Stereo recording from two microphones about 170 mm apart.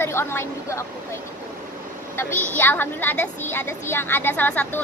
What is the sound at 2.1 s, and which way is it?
Speech, 15° left (ahead or behind).